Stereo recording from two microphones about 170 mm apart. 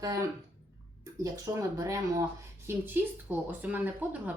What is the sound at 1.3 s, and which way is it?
Speech, 15° right (ahead or behind).